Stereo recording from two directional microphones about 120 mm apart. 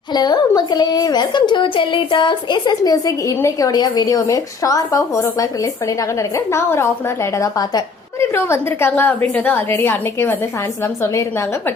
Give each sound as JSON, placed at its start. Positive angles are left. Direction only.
{"t": 0.1, "sound": "a woman's voice", "side_deg": 35}
{"t": 8.2, "sound": "a woman's voice", "side_deg": 20}